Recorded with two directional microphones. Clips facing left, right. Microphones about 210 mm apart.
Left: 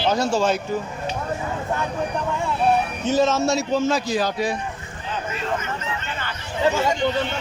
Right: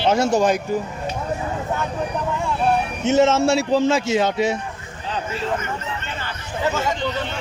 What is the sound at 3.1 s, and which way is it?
A man's voice, 25° right (ahead or behind).